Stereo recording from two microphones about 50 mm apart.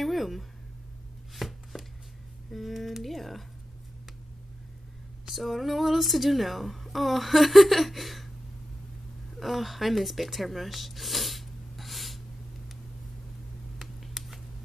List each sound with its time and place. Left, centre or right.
0.0 s a sound: centre
1.3 s chopping: centre
2.5 s speech: centre
5.2 s a woman's voice: centre
9.4 s speech: centre
13.7 s a sound: centre